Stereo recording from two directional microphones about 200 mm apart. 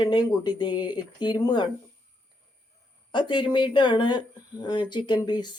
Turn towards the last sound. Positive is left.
turn(degrees=20)  # may be behind; listen again after turning